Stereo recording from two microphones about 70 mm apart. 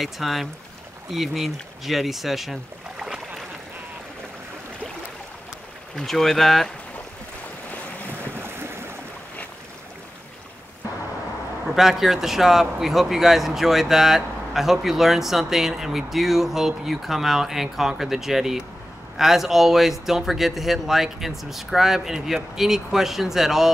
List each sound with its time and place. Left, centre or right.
0.0 s speech: centre
5.9 s speech: centre
8.4 s a sound: right
11.7 s speech: centre